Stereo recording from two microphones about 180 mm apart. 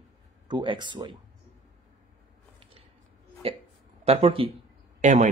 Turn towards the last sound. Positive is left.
turn(degrees=-40)  # may be behind; listen again after turning